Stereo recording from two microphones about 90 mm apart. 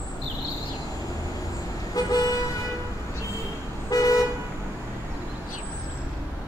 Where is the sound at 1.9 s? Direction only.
45° left (ahead or behind).